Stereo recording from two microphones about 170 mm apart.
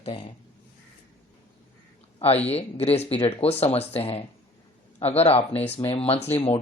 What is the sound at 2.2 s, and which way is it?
Speech, 35° left (ahead or behind).